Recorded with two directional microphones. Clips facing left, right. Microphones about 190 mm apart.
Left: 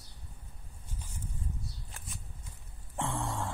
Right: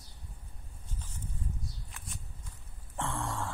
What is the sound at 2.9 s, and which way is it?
Music, 15° left (ahead or behind).